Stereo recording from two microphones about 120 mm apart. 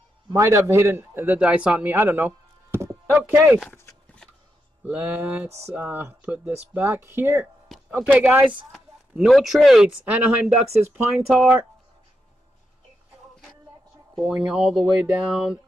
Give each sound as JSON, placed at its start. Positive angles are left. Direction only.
{"t": 0.3, "sound": "a man's voice", "side_deg": -25}
{"t": 4.8, "sound": "speech", "side_deg": -15}
{"t": 7.7, "sound": "a sound", "side_deg": 0}
{"t": 8.1, "sound": "speech", "side_deg": -15}
{"t": 8.7, "sound": "speech", "side_deg": 0}
{"t": 14.3, "sound": "speech", "side_deg": -5}